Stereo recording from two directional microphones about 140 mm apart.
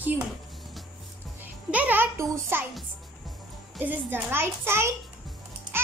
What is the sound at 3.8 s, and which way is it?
A child's voice, 15° right (ahead or behind).